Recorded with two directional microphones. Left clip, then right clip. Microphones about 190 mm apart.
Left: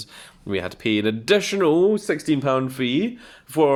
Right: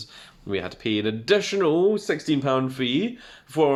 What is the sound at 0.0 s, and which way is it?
Speech, 50° left (ahead or behind).